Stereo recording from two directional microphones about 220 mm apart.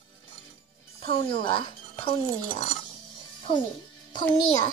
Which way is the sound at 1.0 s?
25° left (ahead or behind).